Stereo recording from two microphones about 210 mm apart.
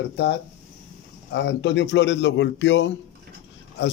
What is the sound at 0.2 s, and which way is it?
A man's voice, 55° left (ahead or behind).